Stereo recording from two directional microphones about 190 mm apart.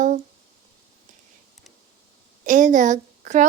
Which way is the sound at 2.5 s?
40° right (ahead or behind).